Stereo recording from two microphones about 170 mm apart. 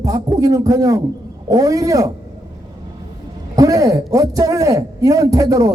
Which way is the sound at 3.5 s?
20° right (ahead or behind).